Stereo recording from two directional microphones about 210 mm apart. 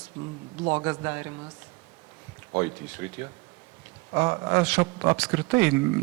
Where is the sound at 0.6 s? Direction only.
20° right (ahead or behind).